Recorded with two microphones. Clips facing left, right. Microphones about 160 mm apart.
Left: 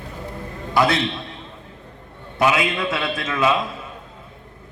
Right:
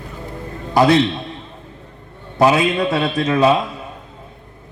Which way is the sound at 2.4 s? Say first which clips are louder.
Right 5 dB; 35° right (ahead or behind).